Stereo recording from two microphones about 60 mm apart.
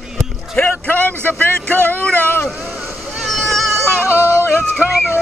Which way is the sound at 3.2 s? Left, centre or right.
Centre.